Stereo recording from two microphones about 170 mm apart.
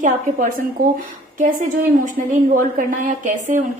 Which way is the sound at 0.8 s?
60° right (ahead or behind).